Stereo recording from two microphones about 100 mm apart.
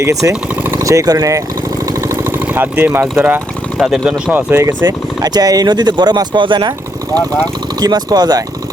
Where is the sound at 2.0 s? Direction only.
25° right (ahead or behind).